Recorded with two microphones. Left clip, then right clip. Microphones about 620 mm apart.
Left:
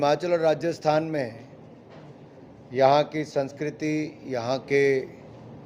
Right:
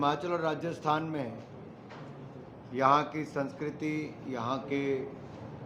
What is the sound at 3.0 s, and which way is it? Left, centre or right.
A man's voice, left.